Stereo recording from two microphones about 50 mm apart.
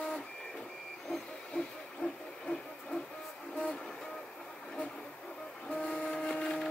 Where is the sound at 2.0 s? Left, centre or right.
Left.